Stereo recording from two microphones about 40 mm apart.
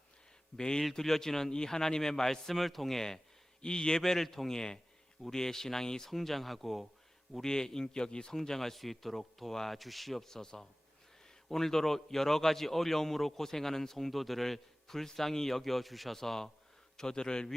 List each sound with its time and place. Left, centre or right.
0.5 s a man's voice: centre
3.6 s a man's voice: left; by 6.8 s centre
7.4 s a man's voice: centre